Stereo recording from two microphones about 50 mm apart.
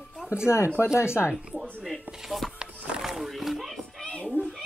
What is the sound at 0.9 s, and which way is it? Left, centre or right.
Speech, left.